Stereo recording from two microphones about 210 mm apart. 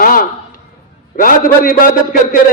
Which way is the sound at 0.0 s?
40° left (ahead or behind).